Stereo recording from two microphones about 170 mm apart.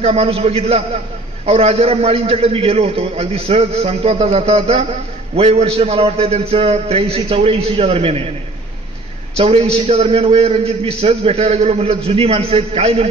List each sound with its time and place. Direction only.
0.0 s a man's voice: 35° right (ahead or behind)
9.4 s a man's voice: 35° right (ahead or behind)